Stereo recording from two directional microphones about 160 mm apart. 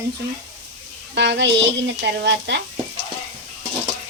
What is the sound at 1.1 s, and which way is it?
Speech, 90° right.